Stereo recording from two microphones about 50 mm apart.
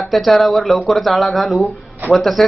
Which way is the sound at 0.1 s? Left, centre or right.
Centre.